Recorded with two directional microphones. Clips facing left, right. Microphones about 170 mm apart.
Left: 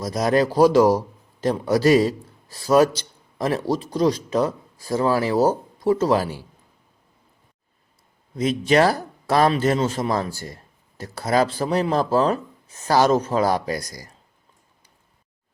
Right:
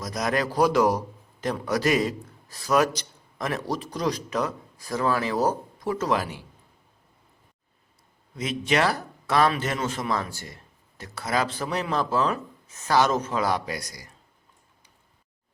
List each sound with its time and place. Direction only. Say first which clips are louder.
0.0 s a man's voice: left 7 dB; 30° left (ahead or behind)
8.4 s a man's voice: left 7 dB; 35° left (ahead or behind)